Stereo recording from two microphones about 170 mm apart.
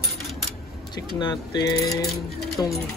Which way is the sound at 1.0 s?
25° left (ahead or behind).